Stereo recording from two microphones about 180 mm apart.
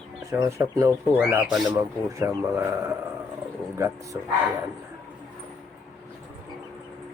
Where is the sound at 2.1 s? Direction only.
15° right (ahead or behind).